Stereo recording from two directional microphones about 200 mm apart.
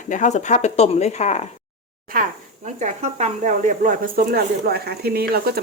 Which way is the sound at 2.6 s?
35° right (ahead or behind).